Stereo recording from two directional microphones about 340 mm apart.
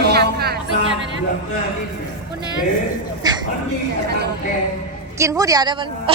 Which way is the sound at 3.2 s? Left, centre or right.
Centre.